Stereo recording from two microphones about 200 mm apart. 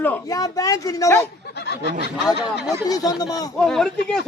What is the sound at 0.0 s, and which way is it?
Speech, 15° left (ahead or behind).